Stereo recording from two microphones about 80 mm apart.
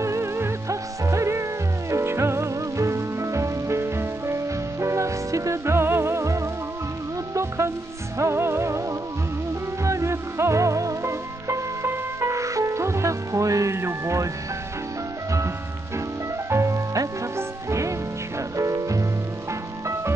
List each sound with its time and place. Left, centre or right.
0.0 s music: right
9.8 s music: right
16.4 s music: right